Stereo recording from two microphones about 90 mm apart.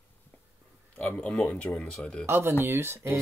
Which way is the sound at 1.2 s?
15° left (ahead or behind).